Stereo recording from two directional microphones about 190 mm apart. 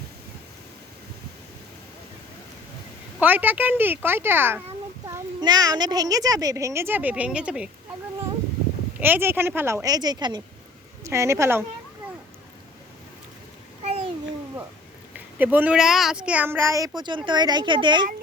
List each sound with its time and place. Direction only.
3.2 s a woman's voice: 10° right (ahead or behind)
9.0 s speech: 10° right (ahead or behind)
15.1 s speech: 10° right (ahead or behind); by 18.1 s 25° right (ahead or behind)